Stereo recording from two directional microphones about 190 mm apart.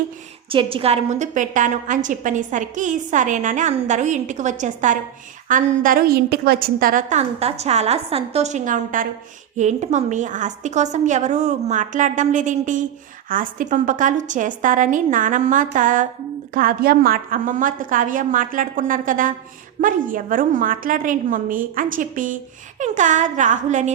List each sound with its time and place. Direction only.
0.5 s a woman's voice: 30° right (ahead or behind)